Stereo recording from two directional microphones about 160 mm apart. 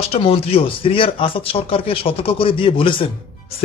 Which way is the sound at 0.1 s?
35° left (ahead or behind).